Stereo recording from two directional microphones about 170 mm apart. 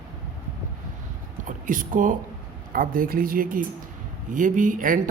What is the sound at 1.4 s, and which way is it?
A man's voice, 50° right (ahead or behind).